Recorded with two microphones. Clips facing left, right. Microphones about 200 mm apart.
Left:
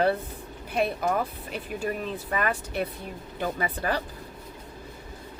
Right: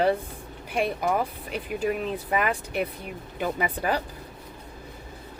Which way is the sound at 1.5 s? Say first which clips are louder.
Right 3 dB; 15° right (ahead or behind).